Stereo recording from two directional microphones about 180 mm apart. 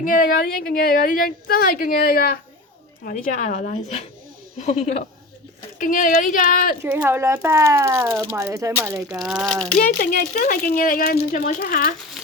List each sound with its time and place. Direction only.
0.0 s a woman's voice: 50° left (ahead or behind)
3.0 s a woman's voice: 45° left (ahead or behind)
6.8 s speech: 10° right (ahead or behind)
9.2 s a child's voice: 5° right (ahead or behind)
9.7 s a woman's voice: 50° left (ahead or behind)
12.2 s dog: centre (ahead or behind)